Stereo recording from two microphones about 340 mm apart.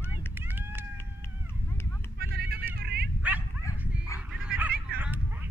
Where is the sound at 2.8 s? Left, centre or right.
Right.